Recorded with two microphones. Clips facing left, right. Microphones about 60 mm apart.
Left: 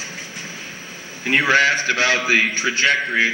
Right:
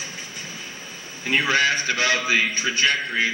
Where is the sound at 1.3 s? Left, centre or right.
Left.